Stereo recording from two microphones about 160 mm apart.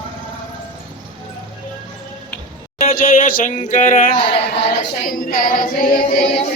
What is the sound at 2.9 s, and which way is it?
Singing, 60° left (ahead or behind).